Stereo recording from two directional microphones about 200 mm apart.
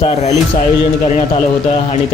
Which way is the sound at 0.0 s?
30° left (ahead or behind).